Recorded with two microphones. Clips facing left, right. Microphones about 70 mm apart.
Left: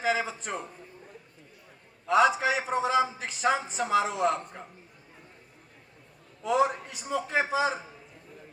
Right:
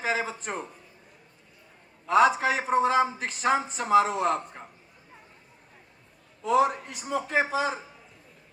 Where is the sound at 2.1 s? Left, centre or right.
Right.